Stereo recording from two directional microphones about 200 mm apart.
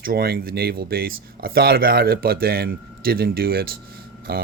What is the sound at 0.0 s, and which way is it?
Speech, 50° right (ahead or behind).